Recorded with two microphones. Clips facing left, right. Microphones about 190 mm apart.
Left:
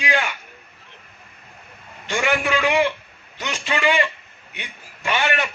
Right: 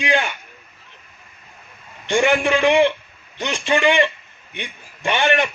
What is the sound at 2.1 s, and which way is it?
Speech, 25° right (ahead or behind).